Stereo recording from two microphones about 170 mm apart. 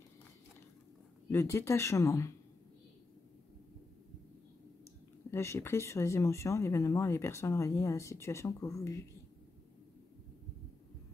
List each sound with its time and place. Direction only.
1.3 s speech: 15° left (ahead or behind)
5.3 s speech: 15° left (ahead or behind)